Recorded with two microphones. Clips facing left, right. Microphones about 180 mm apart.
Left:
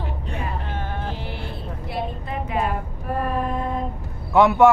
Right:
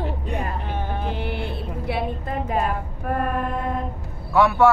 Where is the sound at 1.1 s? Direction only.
60° right (ahead or behind).